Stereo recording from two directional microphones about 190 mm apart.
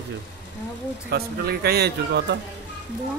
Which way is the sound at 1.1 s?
55° right (ahead or behind).